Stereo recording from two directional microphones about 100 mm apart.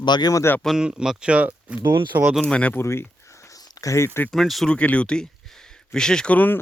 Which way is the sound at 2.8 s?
25° left (ahead or behind).